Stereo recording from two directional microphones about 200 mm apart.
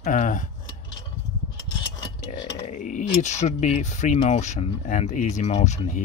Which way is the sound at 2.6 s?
40° left (ahead or behind).